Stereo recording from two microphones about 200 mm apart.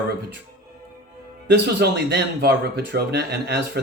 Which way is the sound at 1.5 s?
55° right (ahead or behind).